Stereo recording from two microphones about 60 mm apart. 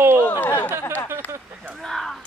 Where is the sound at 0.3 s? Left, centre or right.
Left.